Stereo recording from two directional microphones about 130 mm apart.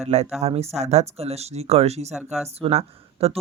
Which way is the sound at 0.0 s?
55° right (ahead or behind).